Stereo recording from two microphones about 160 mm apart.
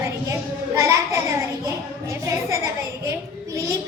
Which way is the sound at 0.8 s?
20° right (ahead or behind).